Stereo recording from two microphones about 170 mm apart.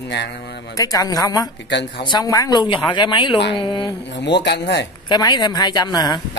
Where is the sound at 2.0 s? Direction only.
25° left (ahead or behind).